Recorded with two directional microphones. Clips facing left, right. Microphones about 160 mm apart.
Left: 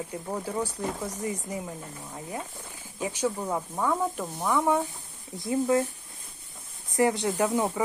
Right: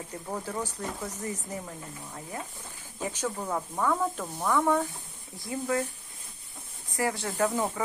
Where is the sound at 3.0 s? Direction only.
10° left (ahead or behind).